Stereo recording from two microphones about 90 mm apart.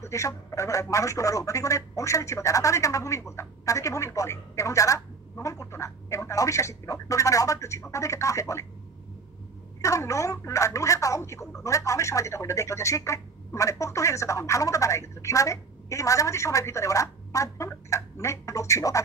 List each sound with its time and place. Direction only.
0.0 s speech: 35° left (ahead or behind)
9.8 s speech: 35° left (ahead or behind)